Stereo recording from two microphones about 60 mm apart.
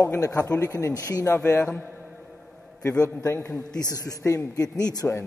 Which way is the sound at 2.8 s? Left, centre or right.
Left.